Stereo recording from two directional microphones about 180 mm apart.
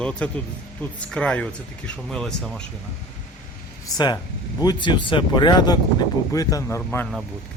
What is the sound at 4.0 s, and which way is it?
A man's voice, 20° left (ahead or behind).